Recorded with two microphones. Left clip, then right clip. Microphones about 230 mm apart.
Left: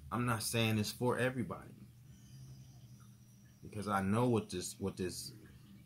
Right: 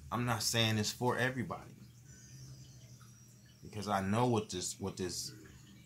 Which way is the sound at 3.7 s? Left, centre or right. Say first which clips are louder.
Right 1 dB; centre.